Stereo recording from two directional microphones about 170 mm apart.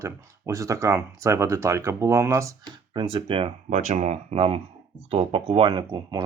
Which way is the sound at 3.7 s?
45° right (ahead or behind).